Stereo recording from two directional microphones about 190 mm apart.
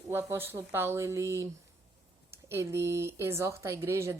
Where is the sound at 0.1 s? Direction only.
10° right (ahead or behind).